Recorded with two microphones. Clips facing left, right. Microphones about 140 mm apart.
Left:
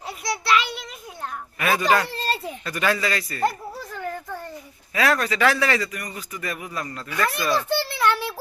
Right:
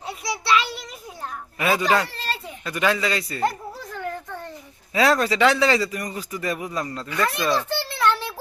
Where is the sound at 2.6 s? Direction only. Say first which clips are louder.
Right 2 dB; 15° right (ahead or behind).